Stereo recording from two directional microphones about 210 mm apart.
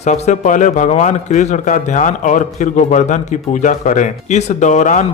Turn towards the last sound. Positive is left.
turn(degrees=35)  # may be behind; listen again after turning